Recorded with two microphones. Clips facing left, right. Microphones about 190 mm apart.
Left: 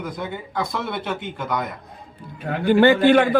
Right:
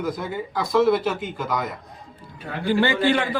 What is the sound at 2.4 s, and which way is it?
Speech, 55° left (ahead or behind).